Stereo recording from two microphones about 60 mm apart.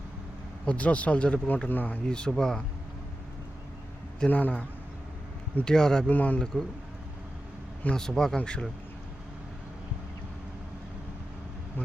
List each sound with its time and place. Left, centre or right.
0.6 s speech: left
2.0 s speech: centre
4.3 s speech: left
5.5 s speech: centre
6.1 s speech: left
6.4 s speech: centre
7.9 s speech: centre